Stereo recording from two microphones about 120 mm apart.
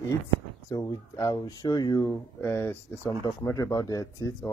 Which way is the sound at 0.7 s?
30° left (ahead or behind).